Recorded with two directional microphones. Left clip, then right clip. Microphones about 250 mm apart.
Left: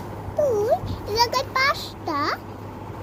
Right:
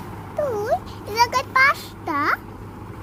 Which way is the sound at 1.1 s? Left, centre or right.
Right.